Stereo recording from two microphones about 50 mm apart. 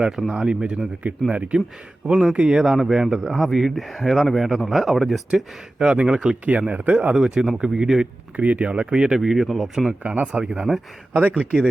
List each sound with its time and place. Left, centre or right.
0.3 s speech: centre
2.5 s speech: centre
5.8 s speech: centre
7.1 s speech: centre
8.4 s speech: right; by 10.8 s centre
11.1 s speech: right